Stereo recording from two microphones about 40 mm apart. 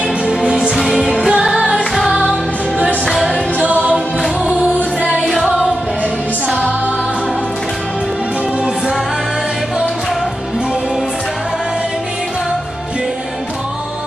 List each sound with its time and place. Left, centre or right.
0.3 s music: centre
0.7 s music: centre
3.5 s music: right